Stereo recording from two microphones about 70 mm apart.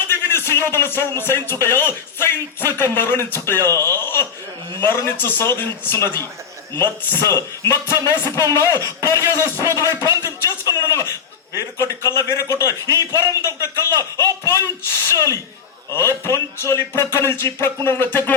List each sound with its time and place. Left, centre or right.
0.1 s a man's voice: left
10.2 s music: left
10.8 s a man's voice: left